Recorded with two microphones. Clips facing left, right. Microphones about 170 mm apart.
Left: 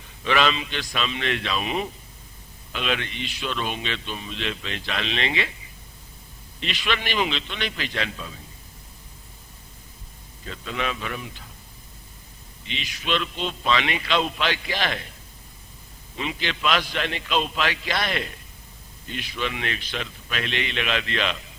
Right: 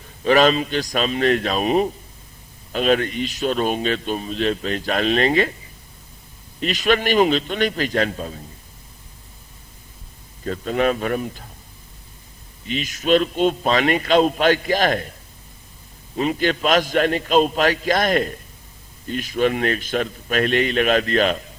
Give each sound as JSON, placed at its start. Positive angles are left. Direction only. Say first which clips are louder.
{"t": 0.3, "sound": "a man's voice", "louder": "right 7 dB", "side_deg": -40}
{"t": 6.6, "sound": "a man's voice", "louder": "right 9 dB", "side_deg": -45}
{"t": 10.4, "sound": "a man's voice", "louder": "right 10 dB", "side_deg": -45}
{"t": 12.6, "sound": "a man's voice", "louder": "right 9 dB", "side_deg": -45}
{"t": 16.1, "sound": "a man's voice", "louder": "right 10 dB", "side_deg": -45}